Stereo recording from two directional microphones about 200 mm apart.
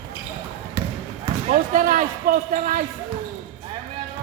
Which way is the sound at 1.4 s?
40° right (ahead or behind).